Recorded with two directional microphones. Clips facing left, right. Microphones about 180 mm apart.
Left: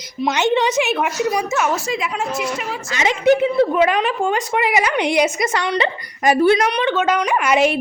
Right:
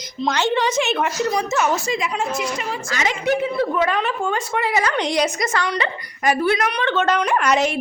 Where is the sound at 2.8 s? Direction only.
20° left (ahead or behind).